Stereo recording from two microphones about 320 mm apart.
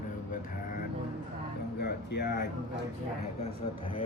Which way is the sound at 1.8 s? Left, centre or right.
Left.